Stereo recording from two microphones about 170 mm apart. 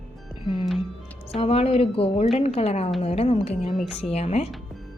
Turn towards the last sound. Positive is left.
turn(degrees=40)  # may be behind; listen again after turning